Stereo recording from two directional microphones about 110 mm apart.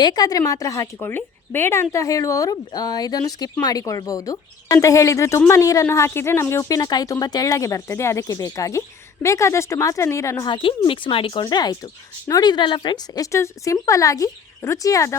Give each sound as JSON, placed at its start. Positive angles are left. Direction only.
{"t": 0.0, "sound": "a woman's voice", "side_deg": 40}
{"t": 10.5, "sound": "speech", "side_deg": 55}
{"t": 11.4, "sound": "a woman's voice", "side_deg": 35}
{"t": 13.3, "sound": "speech", "side_deg": 30}